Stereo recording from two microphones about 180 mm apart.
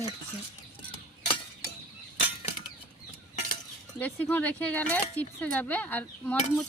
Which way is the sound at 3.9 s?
10° left (ahead or behind).